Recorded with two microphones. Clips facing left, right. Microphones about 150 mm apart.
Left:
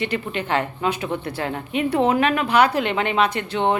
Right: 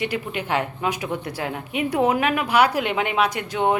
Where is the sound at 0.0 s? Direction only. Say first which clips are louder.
Left 1 dB; 10° right (ahead or behind).